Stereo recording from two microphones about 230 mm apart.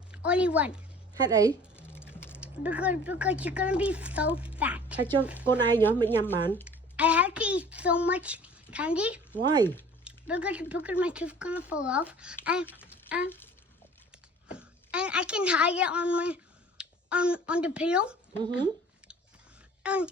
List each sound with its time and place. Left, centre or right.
0.1 s a woman's voice: centre
5.5 s speech: centre
6.9 s speech: centre
9.4 s a woman's voice: centre
10.0 s speech: centre
14.5 s a woman's voice: centre
19.8 s throat clearing: centre